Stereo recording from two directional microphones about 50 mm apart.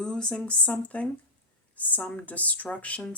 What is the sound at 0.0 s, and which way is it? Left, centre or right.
Speech, centre.